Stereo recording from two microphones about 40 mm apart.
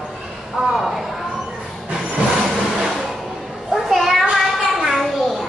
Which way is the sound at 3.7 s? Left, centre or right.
Centre.